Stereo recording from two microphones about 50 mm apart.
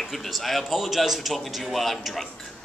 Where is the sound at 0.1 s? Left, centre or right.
Centre.